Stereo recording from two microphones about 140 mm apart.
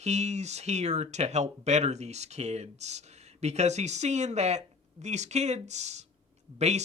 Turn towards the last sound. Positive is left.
turn(degrees=-55)  # may be behind; listen again after turning